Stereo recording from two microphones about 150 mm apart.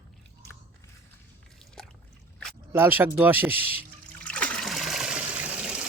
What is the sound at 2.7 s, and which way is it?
Speech, 15° right (ahead or behind).